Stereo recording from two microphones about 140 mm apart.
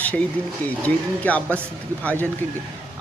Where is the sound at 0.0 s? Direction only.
10° left (ahead or behind).